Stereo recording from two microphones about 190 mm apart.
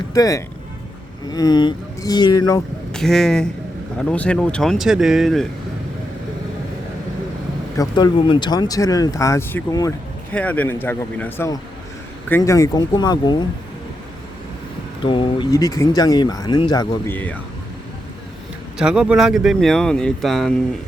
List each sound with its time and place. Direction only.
0.1 s a man's voice: 15° left (ahead or behind)
2.9 s speech: 5° left (ahead or behind)
7.8 s a man's voice: 20° left (ahead or behind)
15.0 s speech: 25° left (ahead or behind)
17.1 s a man's voice: 10° left (ahead or behind)
18.8 s speech: 5° right (ahead or behind)